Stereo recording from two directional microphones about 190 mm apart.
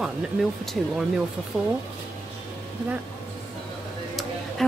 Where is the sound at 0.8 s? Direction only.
5° left (ahead or behind).